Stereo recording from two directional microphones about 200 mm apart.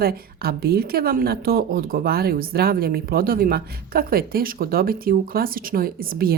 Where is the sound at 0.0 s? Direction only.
50° right (ahead or behind).